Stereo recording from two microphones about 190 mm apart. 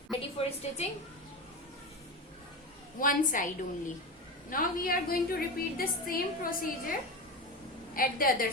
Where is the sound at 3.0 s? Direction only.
45° left (ahead or behind).